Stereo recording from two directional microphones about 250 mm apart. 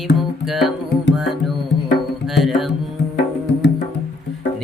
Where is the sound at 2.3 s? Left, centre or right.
Centre.